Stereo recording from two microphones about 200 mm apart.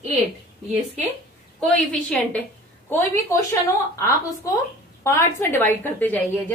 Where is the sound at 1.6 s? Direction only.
5° left (ahead or behind).